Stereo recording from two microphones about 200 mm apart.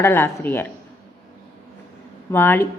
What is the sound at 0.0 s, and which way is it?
Speech, 10° left (ahead or behind).